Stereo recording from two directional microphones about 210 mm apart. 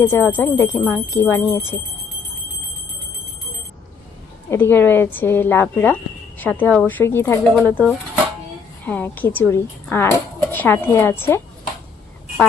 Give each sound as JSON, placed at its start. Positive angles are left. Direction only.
{"t": 0.0, "sound": "a woman's voice", "side_deg": 10}
{"t": 4.4, "sound": "a woman's voice", "side_deg": 10}